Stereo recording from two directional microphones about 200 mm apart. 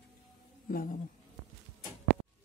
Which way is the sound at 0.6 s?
45° left (ahead or behind).